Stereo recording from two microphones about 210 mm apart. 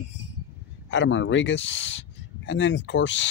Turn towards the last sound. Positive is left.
turn(degrees=60)  # may be behind; listen again after turning